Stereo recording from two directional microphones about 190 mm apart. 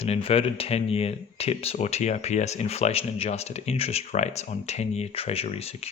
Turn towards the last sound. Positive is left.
turn(degrees=30)  # may be behind; listen again after turning